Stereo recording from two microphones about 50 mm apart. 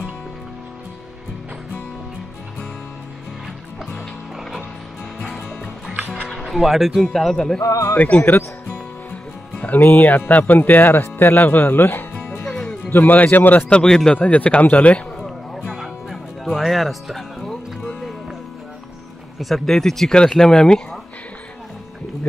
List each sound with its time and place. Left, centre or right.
5.9 s music: right
6.4 s speech: centre
7.6 s speech: left
9.1 s music: left
9.8 s speech: left
11.3 s speech: left
13.7 s speech: centre
14.1 s speech: left
15.1 s a sound: centre
16.5 s speech: centre
19.3 s speech: centre